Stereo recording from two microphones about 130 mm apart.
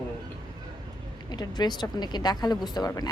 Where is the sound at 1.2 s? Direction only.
35° left (ahead or behind).